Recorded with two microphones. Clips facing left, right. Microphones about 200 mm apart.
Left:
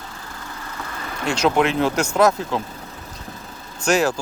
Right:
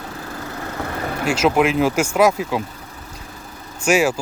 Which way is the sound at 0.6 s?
55° right (ahead or behind).